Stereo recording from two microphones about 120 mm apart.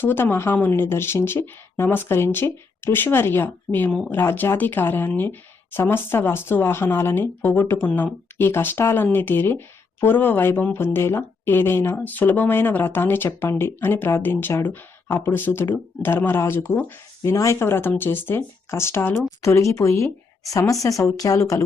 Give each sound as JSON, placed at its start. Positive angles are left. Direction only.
{"t": 0.0, "sound": "speech", "side_deg": 20}